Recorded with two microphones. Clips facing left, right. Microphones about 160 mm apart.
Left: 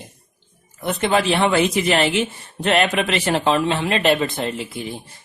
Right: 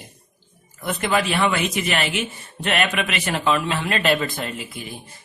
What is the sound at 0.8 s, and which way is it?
Speech, 25° left (ahead or behind).